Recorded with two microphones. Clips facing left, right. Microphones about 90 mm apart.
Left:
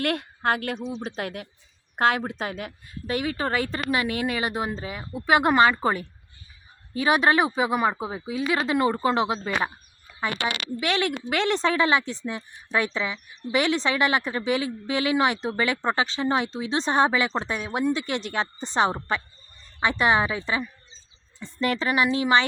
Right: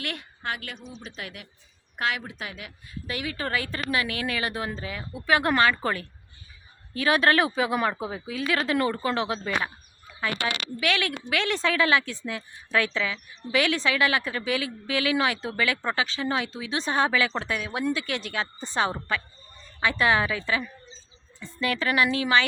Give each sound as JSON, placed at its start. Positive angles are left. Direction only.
{"t": 0.0, "sound": "a woman's voice", "side_deg": 45}
{"t": 0.9, "sound": "speech", "side_deg": 60}
{"t": 1.1, "sound": "a woman's voice", "side_deg": 40}